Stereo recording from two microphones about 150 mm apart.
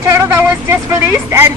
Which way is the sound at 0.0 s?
20° right (ahead or behind).